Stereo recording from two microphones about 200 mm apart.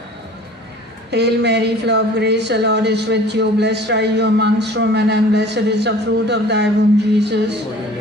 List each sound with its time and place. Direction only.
1.1 s a woman's voice: 55° right (ahead or behind)